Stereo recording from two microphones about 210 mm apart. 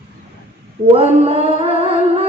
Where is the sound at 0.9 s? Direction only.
30° right (ahead or behind).